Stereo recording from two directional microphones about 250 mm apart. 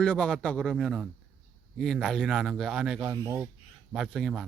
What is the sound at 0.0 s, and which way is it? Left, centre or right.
Speech, centre.